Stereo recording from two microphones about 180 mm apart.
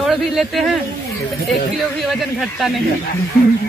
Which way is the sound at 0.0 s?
Centre (ahead or behind).